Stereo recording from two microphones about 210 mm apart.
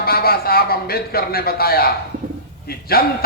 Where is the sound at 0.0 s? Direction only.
45° left (ahead or behind).